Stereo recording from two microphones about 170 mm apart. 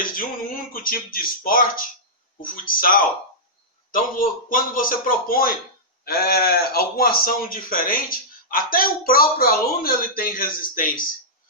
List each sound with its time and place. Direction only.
0.0 s speech: 55° left (ahead or behind)